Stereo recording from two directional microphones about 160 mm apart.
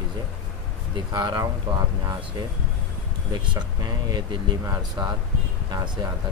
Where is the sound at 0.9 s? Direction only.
25° right (ahead or behind).